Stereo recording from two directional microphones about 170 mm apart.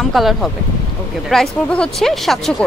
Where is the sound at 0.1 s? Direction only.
Centre (ahead or behind).